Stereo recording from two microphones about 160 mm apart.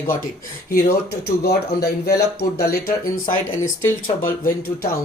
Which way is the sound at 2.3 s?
75° left (ahead or behind).